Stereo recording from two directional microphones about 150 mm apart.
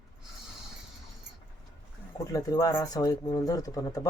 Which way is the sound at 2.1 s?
25° left (ahead or behind).